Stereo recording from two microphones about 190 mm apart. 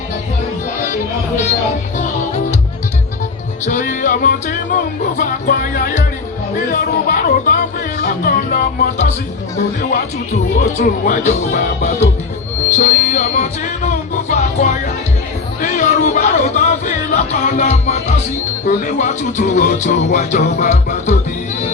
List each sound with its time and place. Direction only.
3.7 s speech: 40° left (ahead or behind)
5.1 s music: 45° left (ahead or behind)
10.6 s speech: 40° left (ahead or behind)
14.3 s music: 40° left (ahead or behind)
18.6 s speech: 40° left (ahead or behind)